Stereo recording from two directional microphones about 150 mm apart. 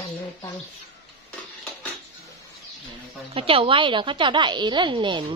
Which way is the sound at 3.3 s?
40° right (ahead or behind).